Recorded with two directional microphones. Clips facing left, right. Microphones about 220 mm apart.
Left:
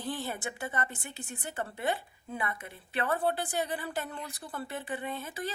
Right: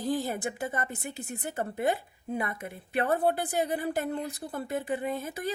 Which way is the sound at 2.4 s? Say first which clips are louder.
Right 3 dB; 45° right (ahead or behind).